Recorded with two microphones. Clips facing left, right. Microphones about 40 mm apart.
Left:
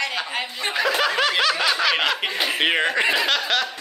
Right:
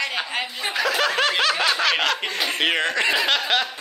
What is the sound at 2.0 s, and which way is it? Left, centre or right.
Speech, centre.